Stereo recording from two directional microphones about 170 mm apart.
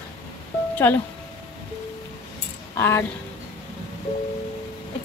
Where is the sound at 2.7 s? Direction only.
15° left (ahead or behind).